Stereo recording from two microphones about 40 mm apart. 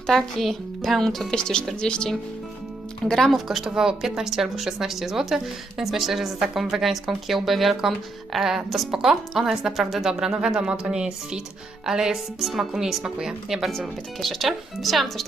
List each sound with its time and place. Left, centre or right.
0.1 s speech: centre
1.4 s speech: centre
3.0 s speech: centre
3.3 s speech: centre
3.8 s a woman's voice: centre
11.9 s a woman's voice: centre
13.7 s speech: centre